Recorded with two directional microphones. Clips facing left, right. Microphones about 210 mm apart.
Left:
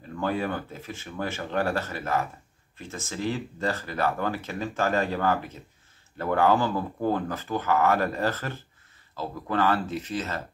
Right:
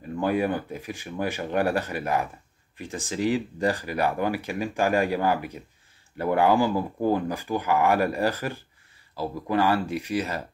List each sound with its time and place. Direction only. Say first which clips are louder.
0.2 s speech: right 4 dB; 15° right (ahead or behind)